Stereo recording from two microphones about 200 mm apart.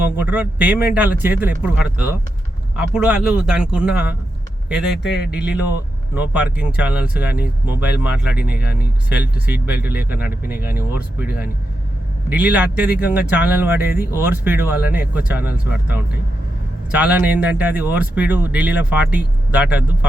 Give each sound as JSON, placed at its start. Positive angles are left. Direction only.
{"t": 0.0, "sound": "a man's voice", "side_deg": -10}
{"t": 5.0, "sound": "speech", "side_deg": 55}
{"t": 5.3, "sound": "a man's voice", "side_deg": -5}
{"t": 16.9, "sound": "speech", "side_deg": -5}